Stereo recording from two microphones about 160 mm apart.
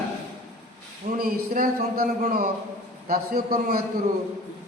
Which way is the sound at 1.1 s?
60° right (ahead or behind).